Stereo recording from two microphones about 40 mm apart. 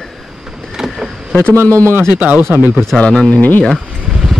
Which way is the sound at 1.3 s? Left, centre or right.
Left.